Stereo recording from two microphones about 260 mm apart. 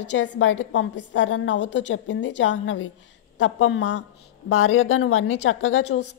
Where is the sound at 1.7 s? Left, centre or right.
Left.